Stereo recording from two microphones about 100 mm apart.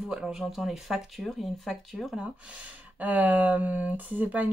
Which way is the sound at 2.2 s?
10° right (ahead or behind).